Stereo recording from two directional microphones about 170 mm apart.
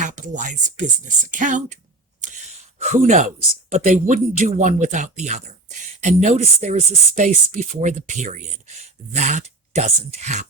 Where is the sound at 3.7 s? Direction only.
45° right (ahead or behind).